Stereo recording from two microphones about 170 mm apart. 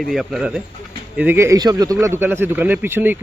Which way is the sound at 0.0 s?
Centre (ahead or behind).